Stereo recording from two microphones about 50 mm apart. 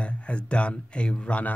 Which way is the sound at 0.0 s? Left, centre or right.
Left.